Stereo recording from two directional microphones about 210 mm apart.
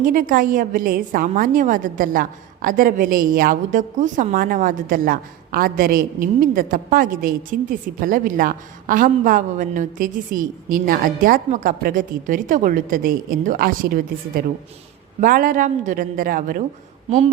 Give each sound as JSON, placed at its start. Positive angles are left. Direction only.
{"t": 0.0, "sound": "a woman's voice", "side_deg": -40}
{"t": 17.1, "sound": "a woman's voice", "side_deg": -30}